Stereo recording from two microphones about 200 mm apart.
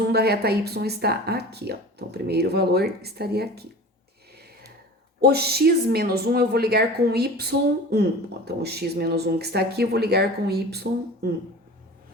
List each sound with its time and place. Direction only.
0.1 s speech: 50° right (ahead or behind)
5.2 s speech: 50° right (ahead or behind)